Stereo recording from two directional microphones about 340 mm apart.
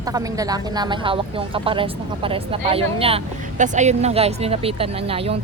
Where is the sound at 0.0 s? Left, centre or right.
Centre.